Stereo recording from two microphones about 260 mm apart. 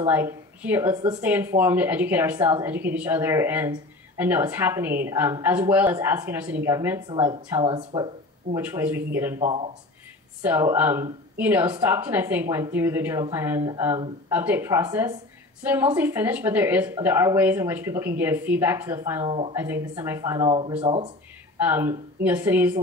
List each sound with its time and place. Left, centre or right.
0.0 s speech: centre
8.5 s speech: centre
9.4 s speech: right
10.4 s speech: centre
21.5 s speech: centre